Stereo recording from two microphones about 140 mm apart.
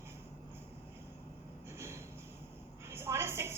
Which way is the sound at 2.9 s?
15° right (ahead or behind).